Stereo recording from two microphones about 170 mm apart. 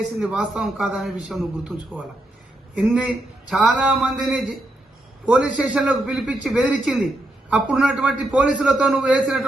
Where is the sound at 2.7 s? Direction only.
5° right (ahead or behind).